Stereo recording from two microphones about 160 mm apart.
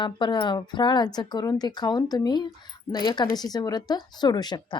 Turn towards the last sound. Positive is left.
turn(degrees=25)  # may be behind; listen again after turning